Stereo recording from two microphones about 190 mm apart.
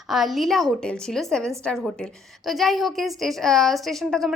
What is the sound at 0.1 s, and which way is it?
A woman's voice, centre (ahead or behind).